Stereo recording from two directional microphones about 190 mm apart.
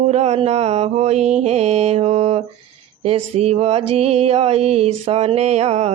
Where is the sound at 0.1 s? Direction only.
35° right (ahead or behind).